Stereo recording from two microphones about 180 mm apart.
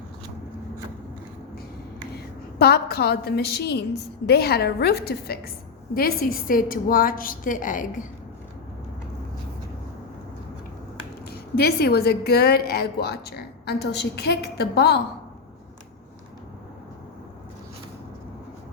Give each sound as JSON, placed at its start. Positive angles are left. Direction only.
{"t": 2.1, "sound": "a woman's voice", "side_deg": 60}
{"t": 11.3, "sound": "a woman's voice", "side_deg": 60}